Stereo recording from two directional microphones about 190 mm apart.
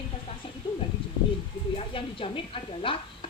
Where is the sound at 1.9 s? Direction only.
30° left (ahead or behind).